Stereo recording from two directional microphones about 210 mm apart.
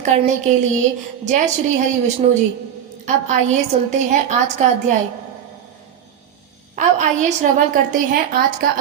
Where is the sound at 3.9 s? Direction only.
35° right (ahead or behind).